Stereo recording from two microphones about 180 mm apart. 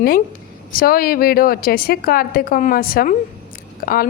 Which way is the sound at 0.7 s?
55° left (ahead or behind).